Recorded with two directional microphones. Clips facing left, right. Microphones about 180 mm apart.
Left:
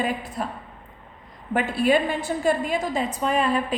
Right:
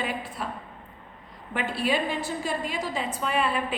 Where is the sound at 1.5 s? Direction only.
50° left (ahead or behind).